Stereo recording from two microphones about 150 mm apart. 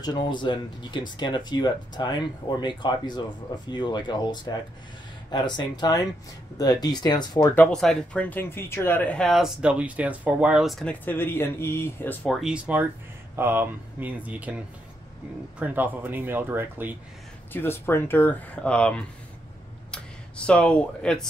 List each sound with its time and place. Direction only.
0.0 s speech: 30° left (ahead or behind)
7.4 s speech: 10° left (ahead or behind)
12.4 s speech: 5° right (ahead or behind)
15.6 s speech: 10° right (ahead or behind)
17.5 s speech: 15° left (ahead or behind)